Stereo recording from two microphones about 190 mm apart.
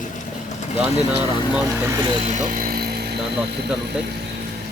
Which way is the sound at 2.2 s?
40° right (ahead or behind).